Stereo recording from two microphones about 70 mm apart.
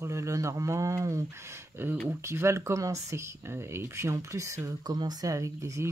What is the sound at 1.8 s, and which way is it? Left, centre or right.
Speech, right.